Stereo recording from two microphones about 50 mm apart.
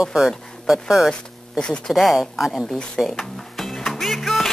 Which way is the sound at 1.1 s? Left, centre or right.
Centre.